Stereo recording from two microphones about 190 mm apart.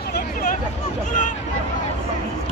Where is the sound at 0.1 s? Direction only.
50° left (ahead or behind).